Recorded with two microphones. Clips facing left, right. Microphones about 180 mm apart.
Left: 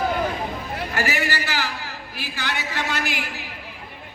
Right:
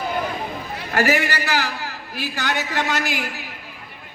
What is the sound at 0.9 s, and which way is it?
A man's voice, 45° right (ahead or behind).